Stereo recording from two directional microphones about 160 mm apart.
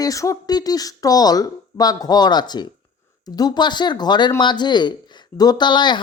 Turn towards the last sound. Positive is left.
turn(degrees=30)  # may be behind; listen again after turning